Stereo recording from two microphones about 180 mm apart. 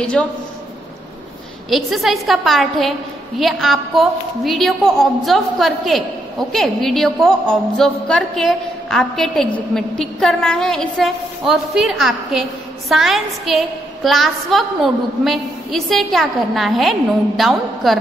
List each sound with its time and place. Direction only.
0.0 s a woman's voice: 5° left (ahead or behind)
1.7 s a woman's voice: centre (ahead or behind)